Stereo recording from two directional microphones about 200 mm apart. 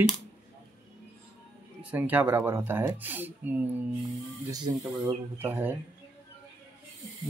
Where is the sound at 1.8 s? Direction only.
10° right (ahead or behind).